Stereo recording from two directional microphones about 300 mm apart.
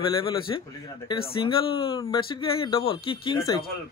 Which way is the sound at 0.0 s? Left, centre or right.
Centre.